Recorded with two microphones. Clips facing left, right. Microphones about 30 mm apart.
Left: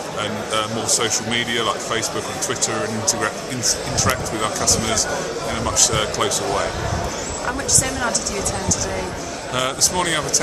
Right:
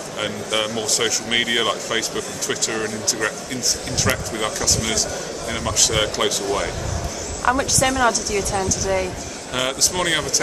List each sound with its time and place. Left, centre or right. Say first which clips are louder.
0.2 s speech: even; centre
5.5 s speech: even; centre
7.4 s a woman's voice: right 5 dB; right
8.1 s speech: right 2 dB; centre
9.6 s speech: left 1 dB; centre